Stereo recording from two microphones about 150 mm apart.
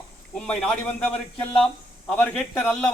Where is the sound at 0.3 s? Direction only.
5° left (ahead or behind).